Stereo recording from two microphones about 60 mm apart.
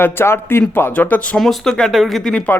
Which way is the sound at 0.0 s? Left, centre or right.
Left.